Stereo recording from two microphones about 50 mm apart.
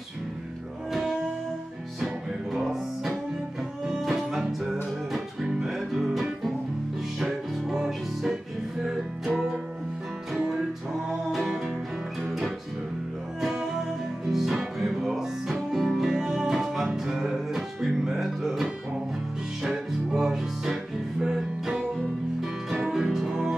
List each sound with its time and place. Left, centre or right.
2.5 s music: centre
12.2 s music: centre
13.4 s music: centre
16.0 s music: centre
20.1 s music: centre
22.8 s music: centre